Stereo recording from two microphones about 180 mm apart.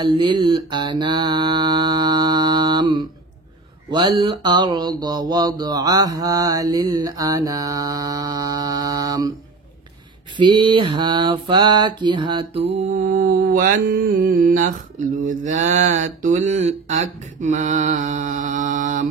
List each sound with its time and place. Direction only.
0.0 s mantra: 25° right (ahead or behind)
10.3 s mantra: 25° right (ahead or behind); by 19.0 s 45° right (ahead or behind)